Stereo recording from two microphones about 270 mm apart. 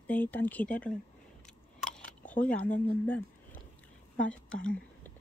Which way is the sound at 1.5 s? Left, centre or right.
Centre.